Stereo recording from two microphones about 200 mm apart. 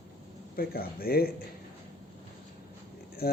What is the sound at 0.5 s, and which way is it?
Speech, 50° left (ahead or behind).